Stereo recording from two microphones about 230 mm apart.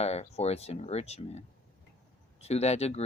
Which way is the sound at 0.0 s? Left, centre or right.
Left.